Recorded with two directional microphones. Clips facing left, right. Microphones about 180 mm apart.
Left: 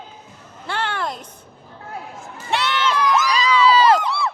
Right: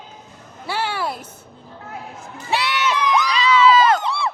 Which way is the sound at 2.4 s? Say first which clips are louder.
Even; 5° right (ahead or behind).